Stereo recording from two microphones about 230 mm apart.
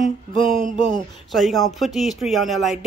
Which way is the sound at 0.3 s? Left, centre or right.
Left.